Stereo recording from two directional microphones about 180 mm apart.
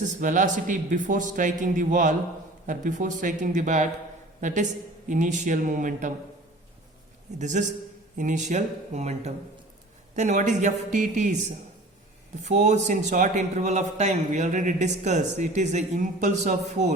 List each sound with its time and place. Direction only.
0.0 s a man's voice: 45° right (ahead or behind)
7.3 s a man's voice: 40° right (ahead or behind)
12.5 s a man's voice: 40° right (ahead or behind)